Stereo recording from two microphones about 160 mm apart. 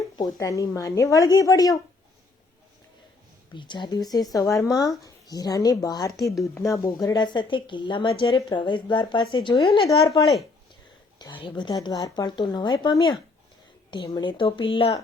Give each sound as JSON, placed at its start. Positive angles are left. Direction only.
{"t": 0.2, "sound": "a woman's voice", "side_deg": 20}
{"t": 3.5, "sound": "a woman's voice", "side_deg": 30}
{"t": 6.1, "sound": "speech", "side_deg": 0}
{"t": 6.6, "sound": "a woman's voice", "side_deg": 20}
{"t": 11.2, "sound": "a woman's voice", "side_deg": 30}